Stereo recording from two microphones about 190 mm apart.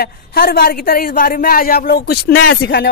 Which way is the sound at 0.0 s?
55° left (ahead or behind).